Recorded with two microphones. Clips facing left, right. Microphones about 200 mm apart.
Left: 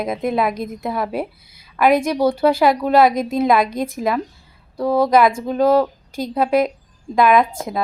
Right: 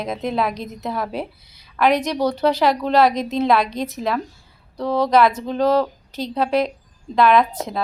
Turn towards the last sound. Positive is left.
turn(degrees=10)  # may be behind; listen again after turning